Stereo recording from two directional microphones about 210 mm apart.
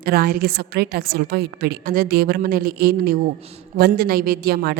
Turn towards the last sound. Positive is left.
turn(degrees=-50)  # may be behind; listen again after turning